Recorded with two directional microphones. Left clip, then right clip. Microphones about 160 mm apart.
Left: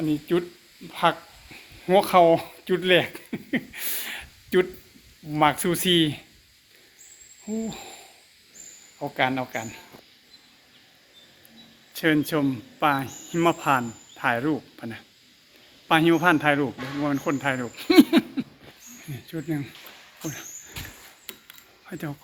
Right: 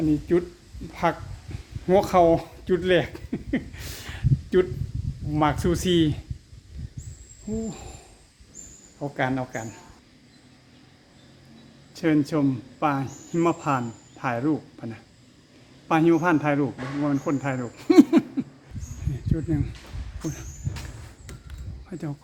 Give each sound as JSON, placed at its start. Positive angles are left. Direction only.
{"t": 0.3, "sound": "speech", "side_deg": 0}
{"t": 7.7, "sound": "hoot", "side_deg": 0}
{"t": 9.0, "sound": "speech", "side_deg": 5}
{"t": 11.9, "sound": "speech", "side_deg": 0}
{"t": 19.1, "sound": "cricket", "side_deg": 0}
{"t": 21.3, "sound": "mechanisms", "side_deg": 20}
{"t": 21.8, "sound": "speech", "side_deg": 5}